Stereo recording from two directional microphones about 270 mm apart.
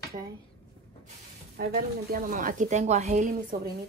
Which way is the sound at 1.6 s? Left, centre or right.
Right.